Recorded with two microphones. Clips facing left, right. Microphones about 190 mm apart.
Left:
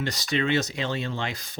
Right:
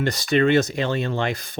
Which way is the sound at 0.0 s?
55° right (ahead or behind).